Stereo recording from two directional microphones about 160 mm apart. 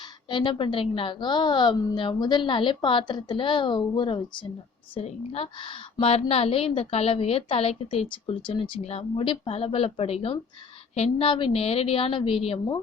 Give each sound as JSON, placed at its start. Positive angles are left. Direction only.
{"t": 0.0, "sound": "a woman's voice", "side_deg": 30}